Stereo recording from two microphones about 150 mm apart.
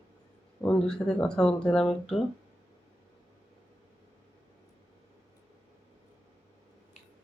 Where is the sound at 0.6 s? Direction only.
5° left (ahead or behind).